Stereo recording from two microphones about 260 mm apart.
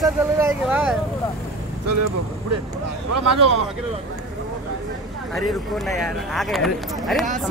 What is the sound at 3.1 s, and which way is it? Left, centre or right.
Speech, right.